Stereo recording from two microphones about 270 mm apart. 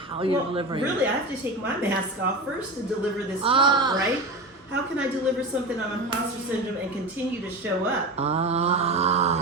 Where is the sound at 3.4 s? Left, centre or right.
Centre.